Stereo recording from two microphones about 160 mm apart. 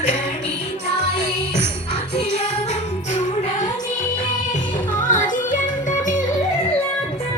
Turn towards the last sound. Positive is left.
turn(degrees=55)  # may be behind; listen again after turning